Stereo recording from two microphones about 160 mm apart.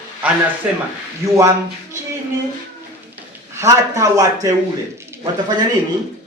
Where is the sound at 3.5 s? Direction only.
20° right (ahead or behind).